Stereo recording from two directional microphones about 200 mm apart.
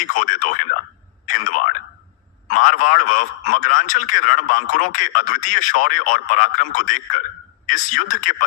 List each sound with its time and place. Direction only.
0.1 s a man's voice: 40° left (ahead or behind)
1.3 s a sound: 40° left (ahead or behind)
2.5 s a man's voice: 40° left (ahead or behind)